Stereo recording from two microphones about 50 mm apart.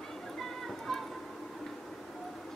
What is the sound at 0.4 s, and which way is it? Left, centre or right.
Music, centre.